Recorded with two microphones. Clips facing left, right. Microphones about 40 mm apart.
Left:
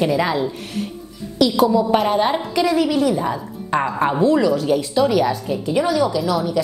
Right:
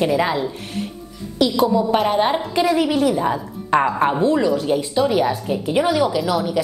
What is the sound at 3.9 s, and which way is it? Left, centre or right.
A woman's voice, centre.